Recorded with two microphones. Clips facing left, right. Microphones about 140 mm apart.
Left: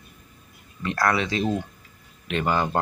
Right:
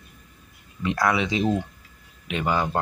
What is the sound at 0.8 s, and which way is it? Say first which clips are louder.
Speech: right 1 dB; 15° right (ahead or behind).